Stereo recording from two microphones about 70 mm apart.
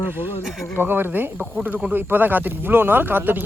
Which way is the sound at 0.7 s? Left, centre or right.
Right.